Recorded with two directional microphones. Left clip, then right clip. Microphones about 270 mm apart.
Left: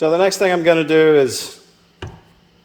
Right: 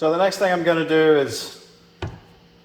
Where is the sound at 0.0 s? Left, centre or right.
Left.